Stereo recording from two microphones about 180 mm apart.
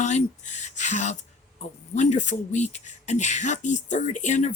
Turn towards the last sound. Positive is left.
turn(degrees=40)  # may be behind; listen again after turning